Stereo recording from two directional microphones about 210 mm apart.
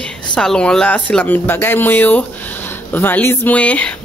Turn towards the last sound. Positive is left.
turn(degrees=5)  # may be behind; listen again after turning